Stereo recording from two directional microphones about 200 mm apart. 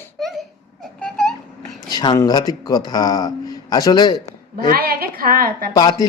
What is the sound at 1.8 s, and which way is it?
A man's voice, 20° left (ahead or behind).